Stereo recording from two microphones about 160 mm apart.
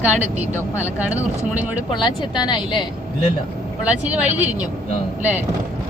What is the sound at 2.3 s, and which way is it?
Speech, 30° left (ahead or behind).